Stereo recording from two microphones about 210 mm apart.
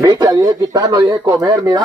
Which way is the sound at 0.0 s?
20° right (ahead or behind).